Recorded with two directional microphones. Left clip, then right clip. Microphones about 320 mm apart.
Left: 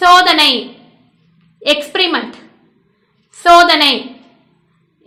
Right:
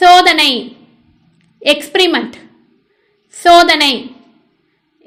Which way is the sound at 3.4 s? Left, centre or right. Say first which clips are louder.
Even; right.